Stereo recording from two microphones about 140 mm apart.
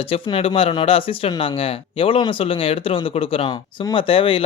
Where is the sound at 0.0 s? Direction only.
40° left (ahead or behind).